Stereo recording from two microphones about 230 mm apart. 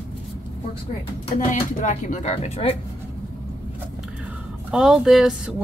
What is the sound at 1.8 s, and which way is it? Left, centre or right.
Speech, left.